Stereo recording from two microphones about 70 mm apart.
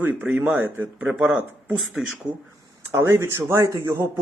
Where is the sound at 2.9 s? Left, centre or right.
Right.